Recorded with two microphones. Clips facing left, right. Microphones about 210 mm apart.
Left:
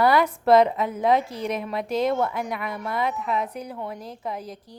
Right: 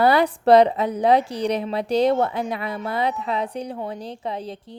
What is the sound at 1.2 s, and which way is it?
Speech, centre (ahead or behind).